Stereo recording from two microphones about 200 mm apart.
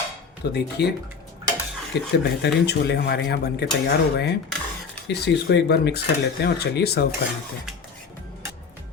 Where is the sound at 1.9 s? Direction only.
55° left (ahead or behind).